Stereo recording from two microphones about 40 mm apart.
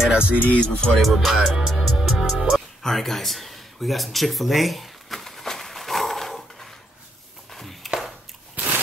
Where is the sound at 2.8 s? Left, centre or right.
Centre.